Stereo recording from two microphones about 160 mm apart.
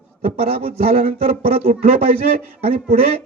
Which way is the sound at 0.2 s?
40° right (ahead or behind).